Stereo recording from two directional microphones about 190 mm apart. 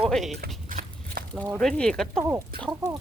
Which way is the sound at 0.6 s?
45° right (ahead or behind).